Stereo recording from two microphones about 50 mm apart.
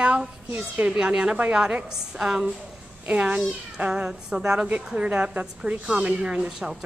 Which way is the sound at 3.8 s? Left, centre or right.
Centre.